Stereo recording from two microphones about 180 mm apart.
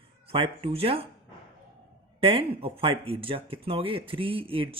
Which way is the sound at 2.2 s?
30° right (ahead or behind).